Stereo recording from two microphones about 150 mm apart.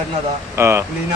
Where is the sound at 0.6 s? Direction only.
20° right (ahead or behind).